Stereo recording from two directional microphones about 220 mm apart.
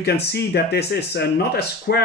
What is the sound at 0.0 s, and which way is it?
Speech, 45° left (ahead or behind).